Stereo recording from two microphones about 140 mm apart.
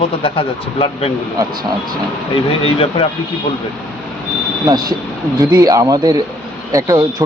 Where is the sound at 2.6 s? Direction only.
45° left (ahead or behind).